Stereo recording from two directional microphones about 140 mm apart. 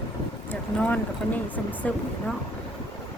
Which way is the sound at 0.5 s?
10° left (ahead or behind).